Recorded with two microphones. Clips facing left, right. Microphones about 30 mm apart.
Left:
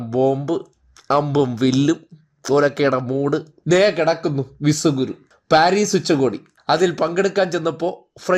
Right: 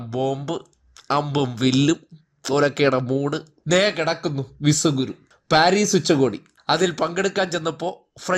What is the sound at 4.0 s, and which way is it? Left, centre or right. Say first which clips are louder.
Speech: left 5 dB; centre.